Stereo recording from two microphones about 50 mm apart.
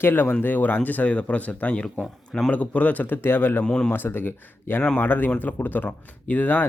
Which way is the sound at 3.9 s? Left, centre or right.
Left.